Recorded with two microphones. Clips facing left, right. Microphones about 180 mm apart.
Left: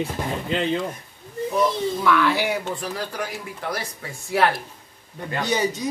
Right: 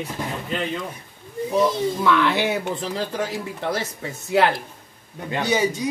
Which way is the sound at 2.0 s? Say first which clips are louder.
Even; 20° right (ahead or behind).